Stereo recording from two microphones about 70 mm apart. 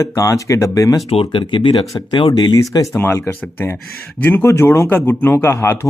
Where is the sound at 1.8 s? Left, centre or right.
Left.